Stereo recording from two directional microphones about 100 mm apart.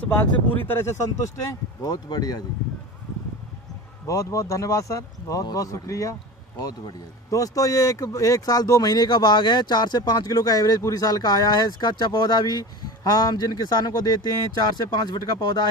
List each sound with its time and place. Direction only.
0.5 s speech: 20° left (ahead or behind)
1.8 s speech: 40° left (ahead or behind)
4.1 s speech: 35° left (ahead or behind)
7.2 s speech: 35° left (ahead or behind)